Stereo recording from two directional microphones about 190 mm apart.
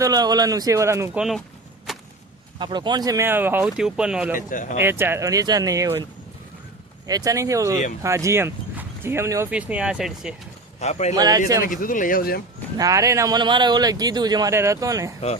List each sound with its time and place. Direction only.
0.0 s speech: 20° right (ahead or behind)
1.9 s whip: centre (ahead or behind)
2.6 s speech: 25° right (ahead or behind); by 4.4 s 5° right (ahead or behind)
4.4 s speech: 45° left (ahead or behind)
4.8 s speech: 10° right (ahead or behind)
7.1 s speech: 15° right (ahead or behind)
10.8 s speech: 35° left (ahead or behind)
11.1 s speech: 20° right (ahead or behind)
11.7 s speech: 45° left (ahead or behind)
12.7 s speech: 20° right (ahead or behind)